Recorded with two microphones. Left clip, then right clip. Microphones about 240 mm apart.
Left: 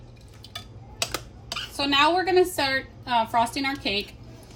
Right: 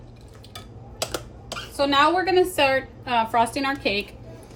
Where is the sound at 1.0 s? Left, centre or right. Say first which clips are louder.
Even; centre.